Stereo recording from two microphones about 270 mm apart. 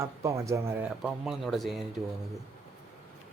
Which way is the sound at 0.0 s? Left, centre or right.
Centre.